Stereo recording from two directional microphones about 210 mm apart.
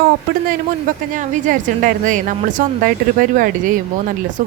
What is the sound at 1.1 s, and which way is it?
Speech, 40° right (ahead or behind).